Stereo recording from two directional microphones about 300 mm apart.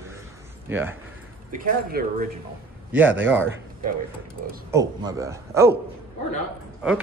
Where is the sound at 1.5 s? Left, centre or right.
Right.